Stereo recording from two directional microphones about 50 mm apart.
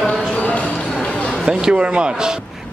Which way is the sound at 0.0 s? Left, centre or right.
Centre.